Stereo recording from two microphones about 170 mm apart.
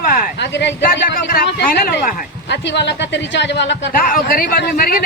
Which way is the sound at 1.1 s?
60° left (ahead or behind).